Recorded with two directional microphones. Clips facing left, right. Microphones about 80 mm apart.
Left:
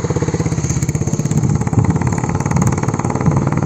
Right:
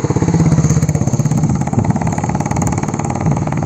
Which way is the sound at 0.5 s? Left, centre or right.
Right.